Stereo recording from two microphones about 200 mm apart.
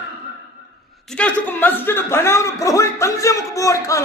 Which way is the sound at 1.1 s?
5° left (ahead or behind).